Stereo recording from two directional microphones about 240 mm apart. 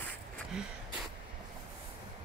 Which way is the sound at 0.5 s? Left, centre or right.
Centre.